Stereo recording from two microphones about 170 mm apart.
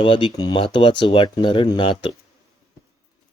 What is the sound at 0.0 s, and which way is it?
Speech, 30° left (ahead or behind).